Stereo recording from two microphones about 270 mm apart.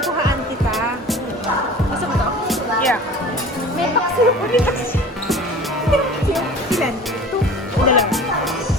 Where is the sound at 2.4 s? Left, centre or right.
Centre.